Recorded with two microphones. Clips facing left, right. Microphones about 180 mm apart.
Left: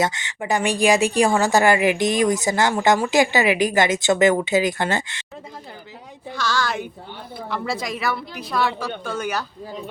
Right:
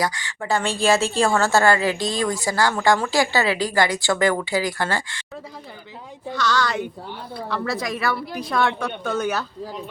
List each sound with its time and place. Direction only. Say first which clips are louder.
0.0 s speech: left 2 dB; 20° left (ahead or behind)
6.3 s speech: right 2 dB; 10° left (ahead or behind)
8.4 s speech: right 2 dB; 5° left (ahead or behind)